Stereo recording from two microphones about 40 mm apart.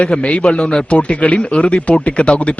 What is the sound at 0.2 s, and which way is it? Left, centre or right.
Speech, left.